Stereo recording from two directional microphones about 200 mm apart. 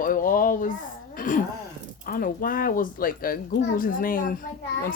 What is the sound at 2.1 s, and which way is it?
A child's voice, 45° left (ahead or behind).